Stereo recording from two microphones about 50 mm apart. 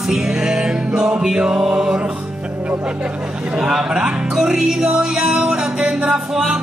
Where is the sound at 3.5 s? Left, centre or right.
Centre.